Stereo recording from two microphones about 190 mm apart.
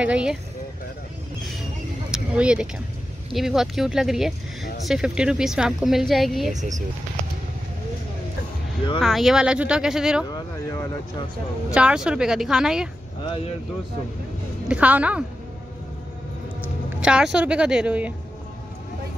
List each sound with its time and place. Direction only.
0.0 s a woman's voice: 5° right (ahead or behind)
2.0 s a sound: 5° right (ahead or behind)
3.3 s a woman's voice: centre (ahead or behind)
6.5 s speech: 40° right (ahead or behind)
9.0 s a woman's voice: centre (ahead or behind)
10.2 s speech: 20° left (ahead or behind)
11.7 s a woman's voice: 5° right (ahead or behind)
14.7 s a woman's voice: 5° right (ahead or behind)
17.0 s a woman's voice: 5° right (ahead or behind)